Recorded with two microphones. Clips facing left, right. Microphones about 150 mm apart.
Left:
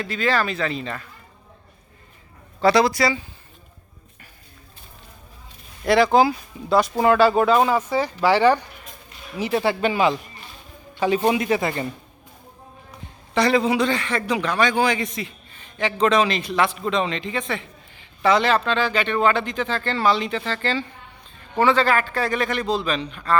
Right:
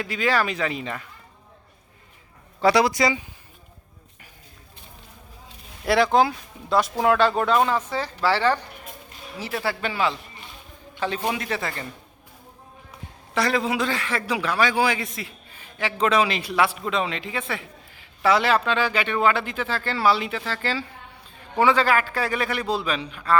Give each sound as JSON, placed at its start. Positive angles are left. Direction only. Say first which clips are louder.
{"t": 0.0, "sound": "a man's voice", "louder": "left 1 dB", "side_deg": -10}
{"t": 2.6, "sound": "a man's voice", "louder": "left 2 dB", "side_deg": -10}
{"t": 5.8, "sound": "a man's voice", "louder": "left 3 dB", "side_deg": 0}
{"t": 13.3, "sound": "a man's voice", "louder": "left 4 dB", "side_deg": 0}